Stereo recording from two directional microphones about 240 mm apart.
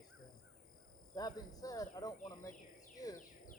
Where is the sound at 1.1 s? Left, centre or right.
Centre.